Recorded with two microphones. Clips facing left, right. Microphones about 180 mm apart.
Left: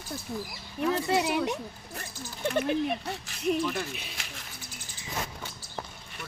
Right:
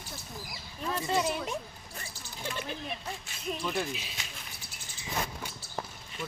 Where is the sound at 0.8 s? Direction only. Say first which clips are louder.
Left 4 dB; 70° left (ahead or behind).